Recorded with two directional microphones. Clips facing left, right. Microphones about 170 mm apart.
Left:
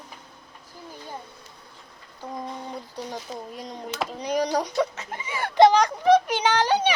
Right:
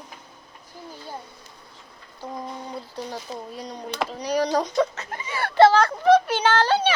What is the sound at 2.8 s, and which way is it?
Speech, 15° left (ahead or behind).